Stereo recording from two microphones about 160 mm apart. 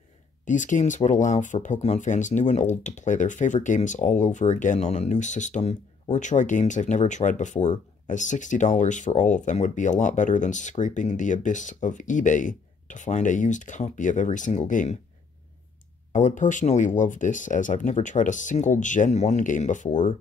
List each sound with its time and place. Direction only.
0.5 s speech: 50° left (ahead or behind)
16.1 s speech: 50° left (ahead or behind)